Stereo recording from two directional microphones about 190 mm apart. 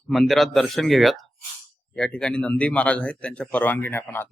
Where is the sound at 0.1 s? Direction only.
Centre (ahead or behind).